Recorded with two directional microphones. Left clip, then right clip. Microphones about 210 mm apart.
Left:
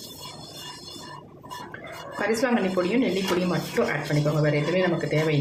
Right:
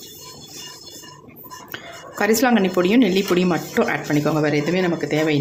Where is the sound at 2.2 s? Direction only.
50° right (ahead or behind).